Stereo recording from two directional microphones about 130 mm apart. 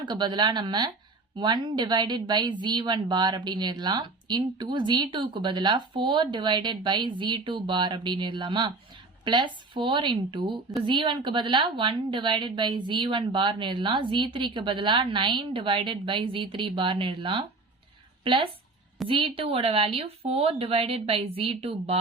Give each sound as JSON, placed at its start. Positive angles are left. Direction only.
{"t": 0.0, "sound": "speech", "side_deg": -35}
{"t": 18.2, "sound": "a sound", "side_deg": -40}
{"t": 19.0, "sound": "speech", "side_deg": -45}